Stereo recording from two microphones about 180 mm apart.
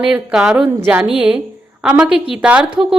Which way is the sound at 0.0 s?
5° right (ahead or behind).